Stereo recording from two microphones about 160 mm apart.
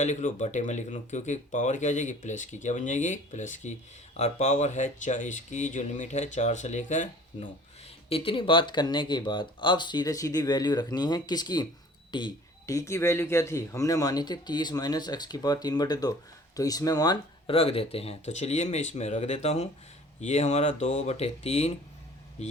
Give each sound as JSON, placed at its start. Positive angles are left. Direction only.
{"t": 0.0, "sound": "speech", "side_deg": 45}
{"t": 8.1, "sound": "speech", "side_deg": 35}
{"t": 17.5, "sound": "speech", "side_deg": 35}